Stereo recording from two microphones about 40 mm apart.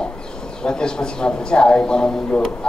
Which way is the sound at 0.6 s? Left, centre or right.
Left.